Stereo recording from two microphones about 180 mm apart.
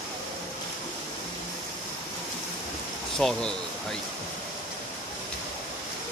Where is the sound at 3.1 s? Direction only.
Centre (ahead or behind).